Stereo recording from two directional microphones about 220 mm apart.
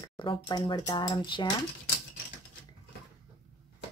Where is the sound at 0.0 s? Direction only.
20° left (ahead or behind).